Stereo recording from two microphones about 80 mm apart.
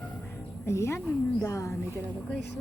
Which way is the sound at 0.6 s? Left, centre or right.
Left.